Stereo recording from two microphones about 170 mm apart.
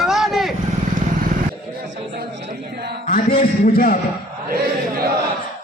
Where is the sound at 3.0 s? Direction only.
55° left (ahead or behind).